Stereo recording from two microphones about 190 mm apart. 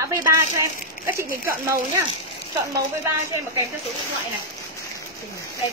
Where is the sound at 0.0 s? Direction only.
15° right (ahead or behind).